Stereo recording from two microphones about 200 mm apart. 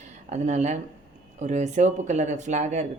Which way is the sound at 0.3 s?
35° right (ahead or behind).